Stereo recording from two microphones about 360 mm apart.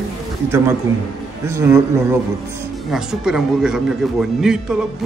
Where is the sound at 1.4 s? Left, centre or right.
Centre.